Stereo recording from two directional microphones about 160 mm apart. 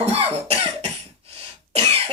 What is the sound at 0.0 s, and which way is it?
Cough, 40° right (ahead or behind).